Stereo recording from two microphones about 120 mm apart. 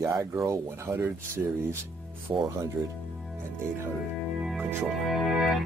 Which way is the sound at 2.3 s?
40° right (ahead or behind).